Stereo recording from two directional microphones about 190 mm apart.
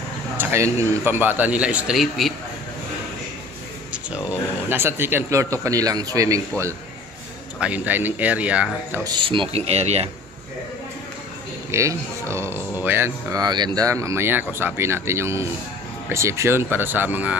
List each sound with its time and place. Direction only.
0.4 s a sound: 15° right (ahead or behind)
1.0 s speech: 10° right (ahead or behind)
4.6 s speech: 10° right (ahead or behind)
7.6 s speech: 10° right (ahead or behind)
9.0 s speech: 25° right (ahead or behind)
11.7 s speech: 15° right (ahead or behind)